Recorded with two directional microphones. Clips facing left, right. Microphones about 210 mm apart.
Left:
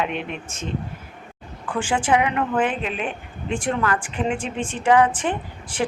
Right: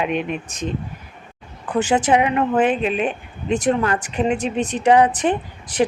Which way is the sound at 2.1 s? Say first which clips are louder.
Right 3 dB; 25° right (ahead or behind).